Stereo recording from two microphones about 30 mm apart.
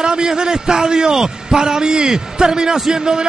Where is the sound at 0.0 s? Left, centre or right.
Right.